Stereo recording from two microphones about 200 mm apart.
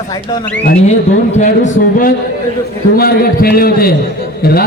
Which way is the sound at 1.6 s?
60° left (ahead or behind).